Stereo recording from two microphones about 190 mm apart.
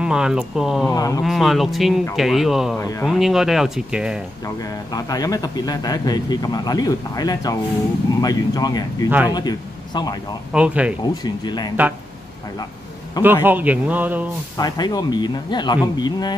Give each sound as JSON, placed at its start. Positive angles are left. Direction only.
{"t": 0.0, "sound": "speech", "side_deg": -5}
{"t": 0.9, "sound": "speech", "side_deg": 20}
{"t": 1.2, "sound": "speech", "side_deg": 0}
{"t": 2.8, "sound": "speech", "side_deg": 15}
{"t": 3.1, "sound": "speech", "side_deg": 0}
{"t": 4.6, "sound": "speech", "side_deg": 20}
{"t": 10.5, "sound": "a man's voice", "side_deg": -5}
{"t": 11.2, "sound": "speech", "side_deg": 20}
{"t": 13.2, "sound": "a man's voice", "side_deg": -10}
{"t": 14.6, "sound": "speech", "side_deg": 20}